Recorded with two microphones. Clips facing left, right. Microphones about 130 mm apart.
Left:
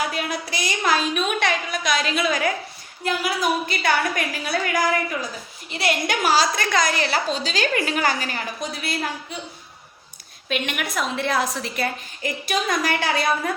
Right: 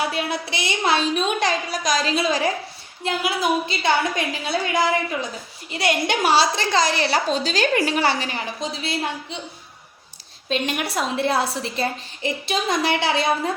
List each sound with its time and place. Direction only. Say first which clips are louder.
0.0 s a woman's voice: right 1 dB; 30° right (ahead or behind)
10.5 s a woman's voice: right 2 dB; 30° right (ahead or behind)